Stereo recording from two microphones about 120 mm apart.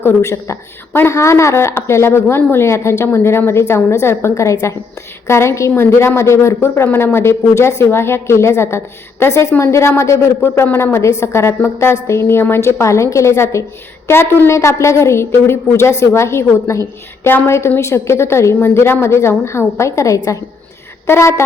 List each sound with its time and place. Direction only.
0.0 s a woman's voice: 25° left (ahead or behind)